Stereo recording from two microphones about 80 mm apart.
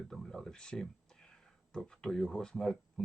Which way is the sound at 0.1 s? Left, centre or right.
Centre.